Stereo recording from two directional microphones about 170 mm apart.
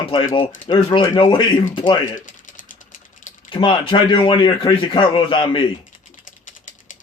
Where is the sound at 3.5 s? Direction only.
30° left (ahead or behind).